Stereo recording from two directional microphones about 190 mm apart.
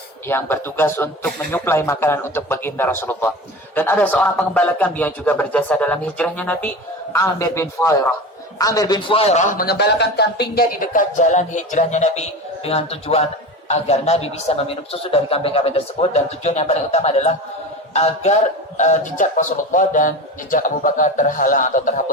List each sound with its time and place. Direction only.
0.3 s a man's voice: 10° left (ahead or behind); by 22.0 s 45° left (ahead or behind)